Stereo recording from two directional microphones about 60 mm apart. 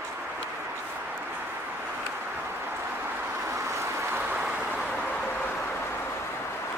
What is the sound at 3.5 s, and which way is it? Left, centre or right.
Vehicle, right.